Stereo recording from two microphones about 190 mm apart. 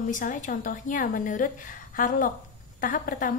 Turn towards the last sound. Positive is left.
turn(degrees=45)  # may be behind; listen again after turning